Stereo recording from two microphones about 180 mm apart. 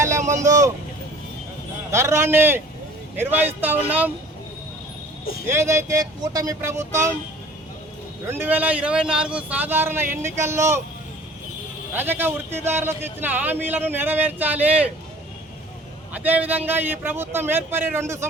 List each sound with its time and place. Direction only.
0.0 s vehicle: 15° right (ahead or behind)
1.9 s speech: 15° right (ahead or behind)
5.5 s speech: 15° right (ahead or behind)
8.3 s speech: 10° right (ahead or behind)
11.9 s speech: 10° right (ahead or behind)
16.1 s speech: 10° right (ahead or behind)